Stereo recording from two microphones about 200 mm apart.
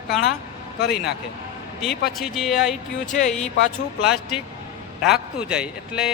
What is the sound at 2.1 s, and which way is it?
Speech, centre (ahead or behind).